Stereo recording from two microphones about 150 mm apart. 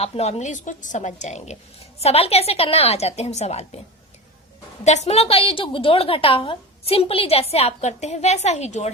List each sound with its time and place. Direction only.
0.0 s a woman's voice: 45° left (ahead or behind)
4.8 s a woman's voice: 50° left (ahead or behind)